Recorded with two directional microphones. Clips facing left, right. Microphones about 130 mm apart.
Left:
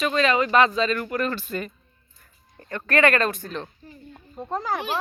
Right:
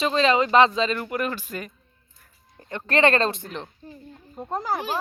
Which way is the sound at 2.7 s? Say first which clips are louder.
Even; 25° right (ahead or behind).